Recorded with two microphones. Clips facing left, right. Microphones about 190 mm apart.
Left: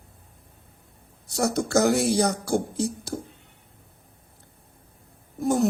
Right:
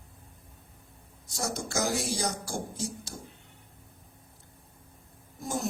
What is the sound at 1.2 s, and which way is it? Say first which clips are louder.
A man's voice: left 10 dB; 65° left (ahead or behind).